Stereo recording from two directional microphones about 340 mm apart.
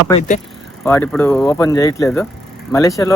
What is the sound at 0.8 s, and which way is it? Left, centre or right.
A man's voice, centre.